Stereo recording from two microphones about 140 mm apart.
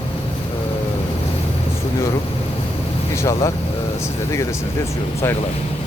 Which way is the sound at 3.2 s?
25° left (ahead or behind).